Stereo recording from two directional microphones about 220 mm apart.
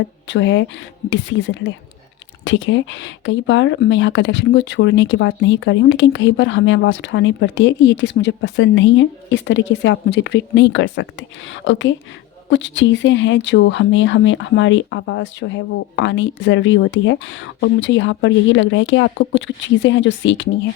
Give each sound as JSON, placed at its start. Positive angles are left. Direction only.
{"t": 0.3, "sound": "speech", "side_deg": 55}